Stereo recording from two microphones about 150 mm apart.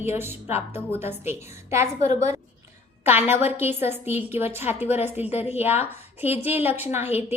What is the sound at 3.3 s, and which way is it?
Speech, 45° left (ahead or behind).